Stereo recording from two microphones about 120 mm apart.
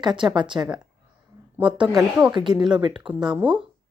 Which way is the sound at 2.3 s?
35° right (ahead or behind).